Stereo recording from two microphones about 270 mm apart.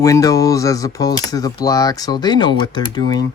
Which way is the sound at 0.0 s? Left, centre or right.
Centre.